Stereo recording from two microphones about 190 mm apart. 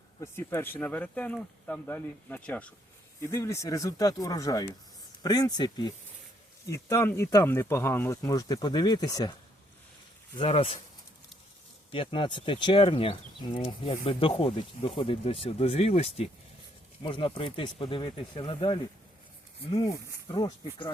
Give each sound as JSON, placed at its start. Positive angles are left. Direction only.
{"t": 0.2, "sound": "speech", "side_deg": 15}
{"t": 10.3, "sound": "speech", "side_deg": 30}
{"t": 11.9, "sound": "speech", "side_deg": 25}